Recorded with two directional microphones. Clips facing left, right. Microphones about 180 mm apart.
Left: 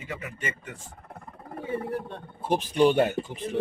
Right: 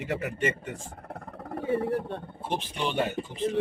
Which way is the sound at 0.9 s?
65° right (ahead or behind).